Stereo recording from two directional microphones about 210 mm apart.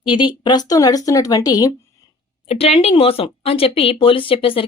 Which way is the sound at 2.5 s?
30° left (ahead or behind).